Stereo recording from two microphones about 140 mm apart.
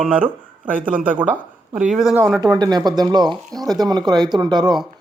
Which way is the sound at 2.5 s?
30° right (ahead or behind).